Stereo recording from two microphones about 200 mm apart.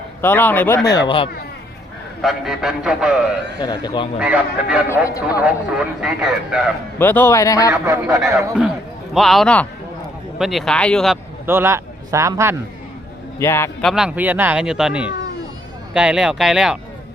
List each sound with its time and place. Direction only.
0.2 s speech: 10° left (ahead or behind)
2.2 s speech: centre (ahead or behind)
3.6 s speech: 20° left (ahead or behind)
4.2 s speech: 5° right (ahead or behind)
7.0 s speech: 10° left (ahead or behind)
7.7 s speech: 15° right (ahead or behind)
9.1 s speech: centre (ahead or behind)
11.4 s a man's voice: 10° right (ahead or behind)
13.4 s speech: 15° left (ahead or behind)
13.8 s speech: 5° right (ahead or behind)